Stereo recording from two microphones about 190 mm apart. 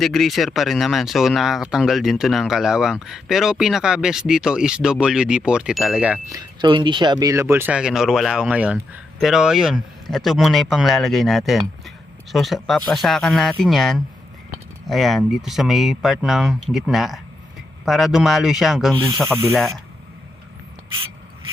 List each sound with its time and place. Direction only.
0.0 s speech: centre (ahead or behind)
6.3 s speech: 25° right (ahead or behind); by 18.9 s centre (ahead or behind)
18.9 s speech: 25° right (ahead or behind)
19.5 s speech: centre (ahead or behind)